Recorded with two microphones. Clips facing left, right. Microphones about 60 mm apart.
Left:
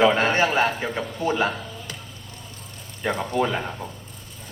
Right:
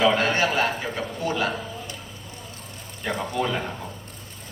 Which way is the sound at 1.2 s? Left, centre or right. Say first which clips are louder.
Left 3 dB; left.